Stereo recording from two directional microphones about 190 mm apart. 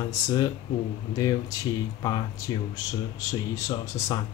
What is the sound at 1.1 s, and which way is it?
Speech, 20° left (ahead or behind).